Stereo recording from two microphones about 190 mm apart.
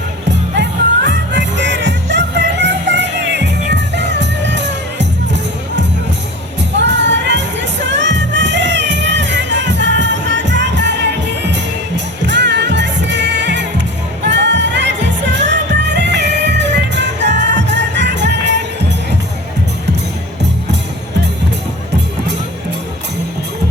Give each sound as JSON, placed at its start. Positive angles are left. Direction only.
{"t": 0.5, "sound": "music", "side_deg": -65}